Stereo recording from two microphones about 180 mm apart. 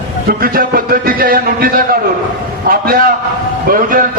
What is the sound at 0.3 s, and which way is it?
A man's voice, 55° right (ahead or behind).